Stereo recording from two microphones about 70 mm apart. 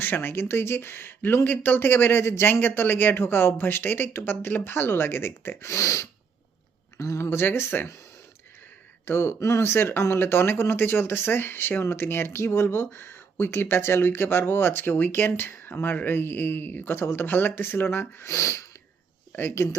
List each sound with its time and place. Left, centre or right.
0.0 s speech: left
9.0 s speech: left
18.3 s speech: left
19.3 s speech: left